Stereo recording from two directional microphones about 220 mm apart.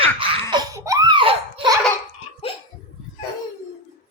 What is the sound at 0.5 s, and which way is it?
Laughter, 15° right (ahead or behind).